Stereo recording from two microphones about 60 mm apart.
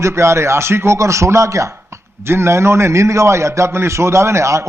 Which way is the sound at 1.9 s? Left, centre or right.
Right.